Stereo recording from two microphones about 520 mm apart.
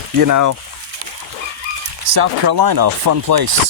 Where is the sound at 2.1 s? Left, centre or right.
Right.